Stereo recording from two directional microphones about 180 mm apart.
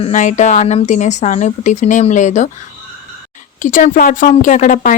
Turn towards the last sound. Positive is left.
turn(degrees=45)  # may be behind; listen again after turning